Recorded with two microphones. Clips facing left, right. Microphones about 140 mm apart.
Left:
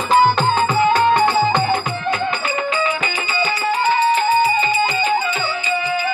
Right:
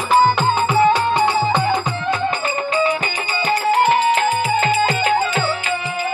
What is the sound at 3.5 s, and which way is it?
Music, 70° right (ahead or behind).